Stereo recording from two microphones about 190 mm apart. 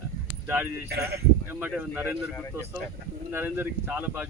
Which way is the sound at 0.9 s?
55° right (ahead or behind).